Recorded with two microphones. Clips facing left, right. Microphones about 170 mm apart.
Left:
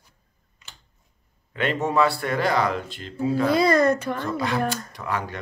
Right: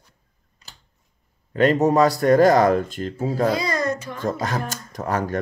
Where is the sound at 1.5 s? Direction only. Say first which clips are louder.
Right 6 dB; 40° right (ahead or behind).